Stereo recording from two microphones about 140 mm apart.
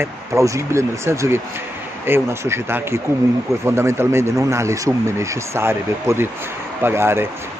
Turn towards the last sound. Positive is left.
turn(degrees=-15)  # may be behind; listen again after turning